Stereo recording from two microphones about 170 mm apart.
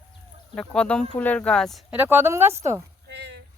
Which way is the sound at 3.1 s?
85° right.